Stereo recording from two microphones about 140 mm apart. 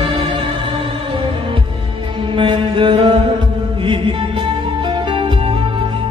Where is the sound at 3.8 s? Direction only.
40° right (ahead or behind).